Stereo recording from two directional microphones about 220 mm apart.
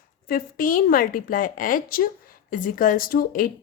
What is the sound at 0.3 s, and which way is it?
A woman's voice, 40° left (ahead or behind).